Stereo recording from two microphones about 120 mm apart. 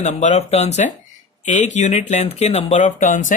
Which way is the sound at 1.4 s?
90° left.